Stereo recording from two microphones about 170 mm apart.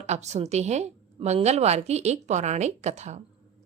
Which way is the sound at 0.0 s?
40° right (ahead or behind).